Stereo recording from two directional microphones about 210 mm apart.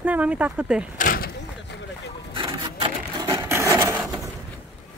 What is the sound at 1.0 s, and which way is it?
Door, 45° left (ahead or behind).